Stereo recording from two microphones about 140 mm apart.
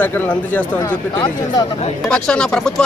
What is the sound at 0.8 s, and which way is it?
Speech, 30° left (ahead or behind).